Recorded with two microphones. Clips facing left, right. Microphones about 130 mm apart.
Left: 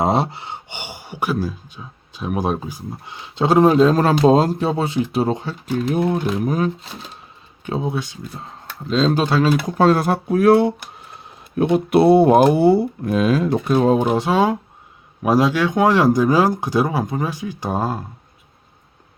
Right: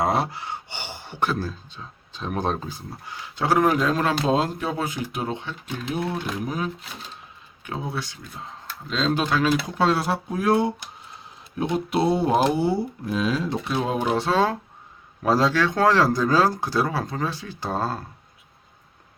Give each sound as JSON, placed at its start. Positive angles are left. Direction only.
{"t": 0.0, "sound": "speech", "side_deg": 25}
{"t": 7.6, "sound": "speech", "side_deg": 25}
{"t": 8.9, "sound": "speech", "side_deg": 35}
{"t": 9.6, "sound": "speech", "side_deg": 45}
{"t": 14.1, "sound": "speech", "side_deg": 15}